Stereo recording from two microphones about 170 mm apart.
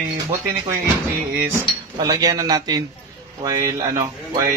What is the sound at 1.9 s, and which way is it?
Speech, 20° right (ahead or behind).